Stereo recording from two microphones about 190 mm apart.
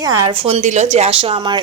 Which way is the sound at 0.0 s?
20° right (ahead or behind).